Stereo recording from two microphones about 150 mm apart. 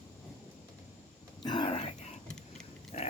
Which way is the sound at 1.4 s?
30° left (ahead or behind).